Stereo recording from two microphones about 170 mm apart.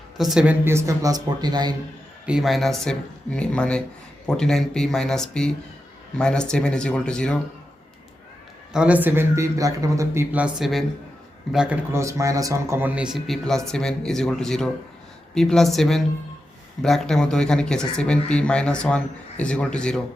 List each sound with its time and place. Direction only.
0.2 s speech: 5° right (ahead or behind); by 1.7 s 25° right (ahead or behind)
2.2 s speech: 5° right (ahead or behind)
8.7 s speech: 5° right (ahead or behind)